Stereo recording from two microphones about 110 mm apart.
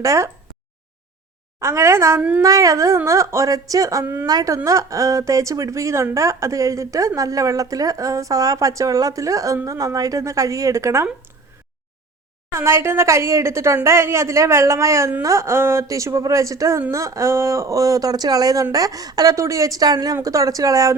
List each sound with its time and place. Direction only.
0.0 s a woman's voice: 30° right (ahead or behind)
1.5 s a woman's voice: 25° right (ahead or behind)
4.0 s a woman's voice: 20° right (ahead or behind)
4.3 s a woman's voice: 35° right (ahead or behind)
12.5 s a woman's voice: 25° right (ahead or behind)